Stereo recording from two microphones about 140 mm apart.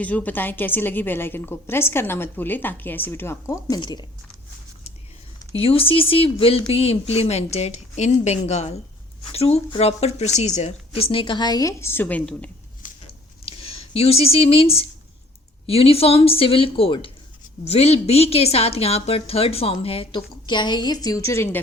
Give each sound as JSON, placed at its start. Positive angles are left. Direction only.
{"t": 0.0, "sound": "a woman's voice", "side_deg": 10}
{"t": 3.8, "sound": "speech", "side_deg": 30}
{"t": 5.5, "sound": "a woman's voice", "side_deg": 40}
{"t": 13.4, "sound": "a woman's voice", "side_deg": 45}